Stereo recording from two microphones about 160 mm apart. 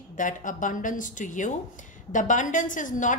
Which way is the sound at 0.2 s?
55° left (ahead or behind).